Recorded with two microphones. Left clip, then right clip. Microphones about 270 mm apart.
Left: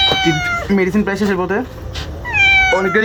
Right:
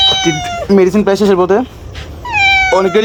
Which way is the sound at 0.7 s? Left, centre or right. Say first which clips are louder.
Right 12 dB; right.